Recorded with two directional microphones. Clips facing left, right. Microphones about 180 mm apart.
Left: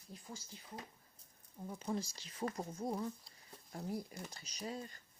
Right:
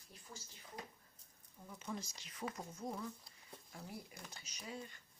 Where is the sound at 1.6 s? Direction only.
35° left (ahead or behind).